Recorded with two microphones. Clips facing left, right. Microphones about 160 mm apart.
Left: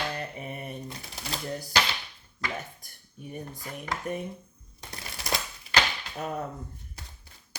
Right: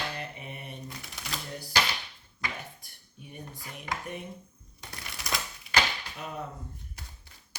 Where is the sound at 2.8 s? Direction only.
45° left (ahead or behind).